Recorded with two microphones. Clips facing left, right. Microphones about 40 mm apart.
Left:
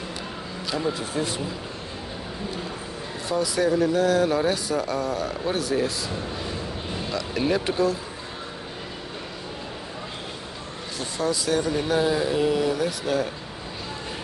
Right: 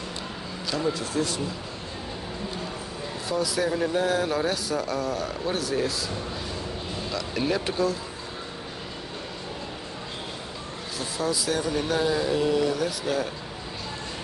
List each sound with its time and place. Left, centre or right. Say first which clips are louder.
0.7 s speech: even; centre
0.9 s speech: even; left
3.3 s speech: left 3 dB; centre
3.9 s speech: left 3 dB; centre
4.2 s speech: left 4 dB; centre
7.1 s speech: left 3 dB; centre
11.0 s speech: left 2 dB; centre